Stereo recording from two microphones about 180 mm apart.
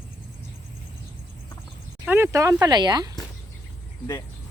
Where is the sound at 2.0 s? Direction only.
15° right (ahead or behind).